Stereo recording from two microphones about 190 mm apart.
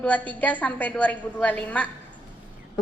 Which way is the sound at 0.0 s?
10° left (ahead or behind).